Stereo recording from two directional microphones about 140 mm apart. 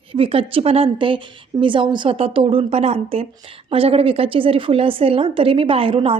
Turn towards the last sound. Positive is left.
turn(degrees=-40)  # may be behind; listen again after turning